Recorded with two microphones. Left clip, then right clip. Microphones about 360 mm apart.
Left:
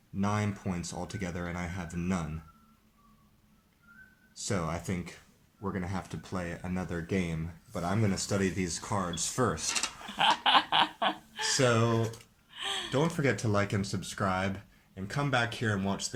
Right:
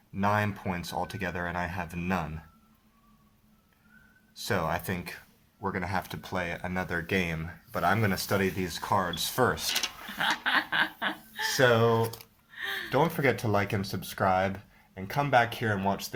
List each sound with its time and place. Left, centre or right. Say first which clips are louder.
0.2 s speech: right 6 dB; right
4.4 s speech: right 5 dB; right
10.2 s a sound: left 3 dB; centre
11.5 s speech: right 5 dB; centre
12.5 s a sound: right 1 dB; centre
12.9 s speech: right 5 dB; right